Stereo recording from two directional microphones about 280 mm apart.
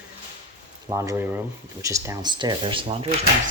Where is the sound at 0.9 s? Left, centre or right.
Centre.